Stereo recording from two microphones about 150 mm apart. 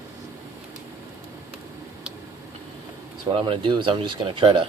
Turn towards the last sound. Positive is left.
turn(degrees=-35)  # may be behind; listen again after turning